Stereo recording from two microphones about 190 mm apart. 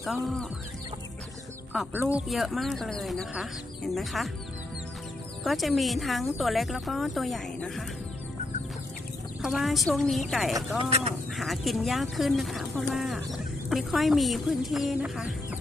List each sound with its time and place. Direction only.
0.0 s speech: centre (ahead or behind)
2.1 s speech: centre (ahead or behind)
5.4 s speech: centre (ahead or behind)
9.4 s speech: centre (ahead or behind)
10.8 s speech: 30° right (ahead or behind)
11.3 s speech: centre (ahead or behind)